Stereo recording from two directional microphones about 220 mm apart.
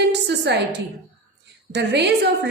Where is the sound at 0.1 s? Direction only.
50° right (ahead or behind).